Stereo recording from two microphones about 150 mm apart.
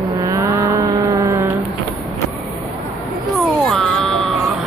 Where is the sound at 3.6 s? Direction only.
Centre (ahead or behind).